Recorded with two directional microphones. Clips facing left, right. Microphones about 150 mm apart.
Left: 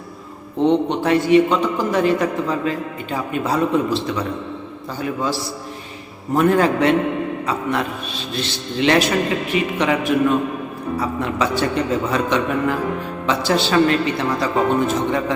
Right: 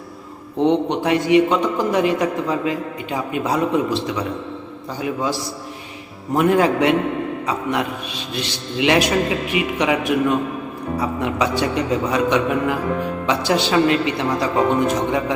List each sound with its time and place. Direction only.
0.6 s a man's voice: 15° right (ahead or behind)
11.2 s a man's voice: 15° right (ahead or behind)